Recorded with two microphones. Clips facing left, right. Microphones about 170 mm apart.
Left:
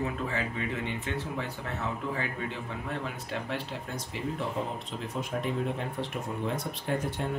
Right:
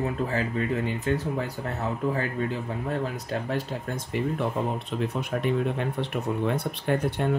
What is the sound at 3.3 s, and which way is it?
Speech, 40° right (ahead or behind).